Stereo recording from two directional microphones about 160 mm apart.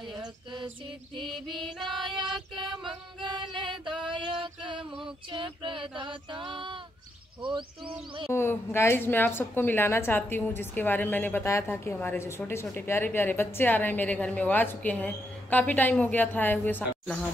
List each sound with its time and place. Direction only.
0.2 s music: 30° right (ahead or behind)
1.5 s female singing: 30° right (ahead or behind)
8.3 s a woman's voice: 15° left (ahead or behind)